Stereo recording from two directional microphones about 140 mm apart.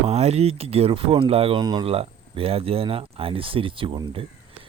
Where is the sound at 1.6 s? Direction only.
30° right (ahead or behind).